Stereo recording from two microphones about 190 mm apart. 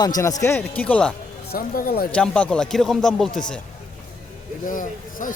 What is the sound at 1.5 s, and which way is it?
Speech, 50° left (ahead or behind).